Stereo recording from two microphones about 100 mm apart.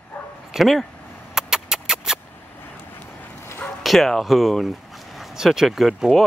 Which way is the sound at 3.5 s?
25° left (ahead or behind).